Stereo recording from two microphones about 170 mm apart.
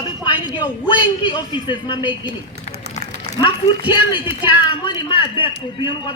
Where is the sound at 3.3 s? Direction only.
30° left (ahead or behind).